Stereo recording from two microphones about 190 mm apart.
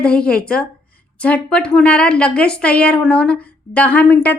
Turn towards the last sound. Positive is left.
turn(degrees=10)  # may be behind; listen again after turning